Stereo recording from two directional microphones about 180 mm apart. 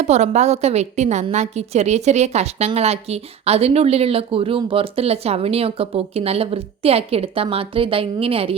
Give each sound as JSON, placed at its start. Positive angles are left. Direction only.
{"t": 0.0, "sound": "a woman's voice", "side_deg": -40}